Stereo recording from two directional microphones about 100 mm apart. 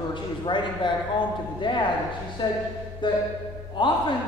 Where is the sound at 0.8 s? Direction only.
50° left (ahead or behind).